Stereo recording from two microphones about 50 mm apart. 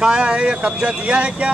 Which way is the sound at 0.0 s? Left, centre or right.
Centre.